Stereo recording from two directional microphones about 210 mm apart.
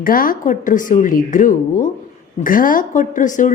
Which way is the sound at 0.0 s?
40° left (ahead or behind).